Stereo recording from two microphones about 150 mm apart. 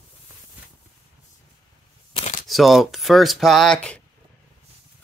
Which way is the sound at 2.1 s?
45° left (ahead or behind).